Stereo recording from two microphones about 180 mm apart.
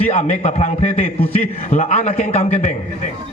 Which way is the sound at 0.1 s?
40° left (ahead or behind).